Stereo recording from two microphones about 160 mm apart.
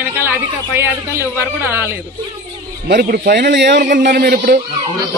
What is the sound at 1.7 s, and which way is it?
Speech, 15° right (ahead or behind).